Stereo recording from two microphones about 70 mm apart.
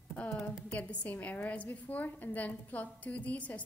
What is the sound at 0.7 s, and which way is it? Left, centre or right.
A woman's voice, centre.